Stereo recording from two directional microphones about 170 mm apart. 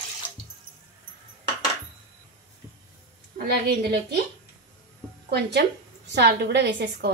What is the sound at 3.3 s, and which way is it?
Speech, 70° right (ahead or behind).